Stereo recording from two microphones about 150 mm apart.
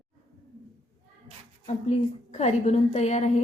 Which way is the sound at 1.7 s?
50° left (ahead or behind).